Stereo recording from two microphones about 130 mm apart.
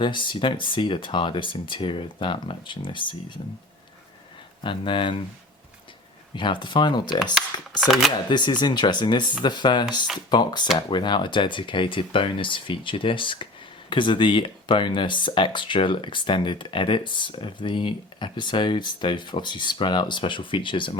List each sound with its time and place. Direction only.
0.0 s speech: 40° left (ahead or behind)
4.6 s speech: 40° left (ahead or behind)
6.3 s speech: 40° left (ahead or behind)
7.8 s speech: centre (ahead or behind)
8.3 s speech: 35° left (ahead or behind)